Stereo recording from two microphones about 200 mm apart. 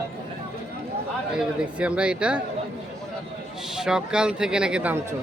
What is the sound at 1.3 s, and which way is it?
Speech, 5° right (ahead or behind).